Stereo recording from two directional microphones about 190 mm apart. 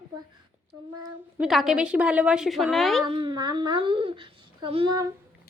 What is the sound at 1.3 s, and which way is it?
A woman's voice, centre (ahead or behind).